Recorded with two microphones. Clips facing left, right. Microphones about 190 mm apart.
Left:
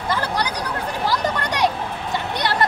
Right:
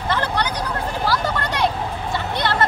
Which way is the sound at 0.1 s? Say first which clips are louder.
Right 1 dB; 10° left (ahead or behind).